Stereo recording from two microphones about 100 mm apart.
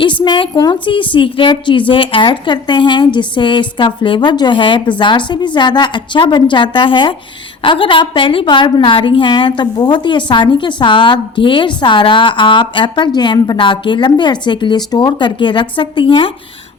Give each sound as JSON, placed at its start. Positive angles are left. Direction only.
{"t": 0.0, "sound": "a woman's voice", "side_deg": 55}